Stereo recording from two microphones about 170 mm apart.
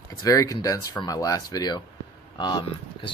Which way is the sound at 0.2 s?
20° left (ahead or behind).